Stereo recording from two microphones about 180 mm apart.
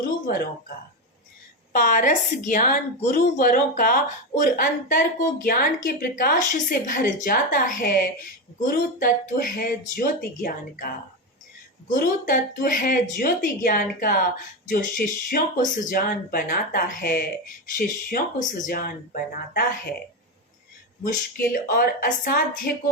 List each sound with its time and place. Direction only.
1.7 s speech: 50° left (ahead or behind)
11.9 s speech: 50° left (ahead or behind)
21.0 s speech: 50° left (ahead or behind)